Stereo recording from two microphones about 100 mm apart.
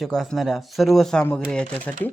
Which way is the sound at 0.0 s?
Centre (ahead or behind).